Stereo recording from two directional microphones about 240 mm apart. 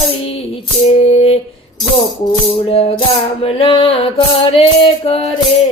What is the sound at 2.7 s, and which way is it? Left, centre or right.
Music, left.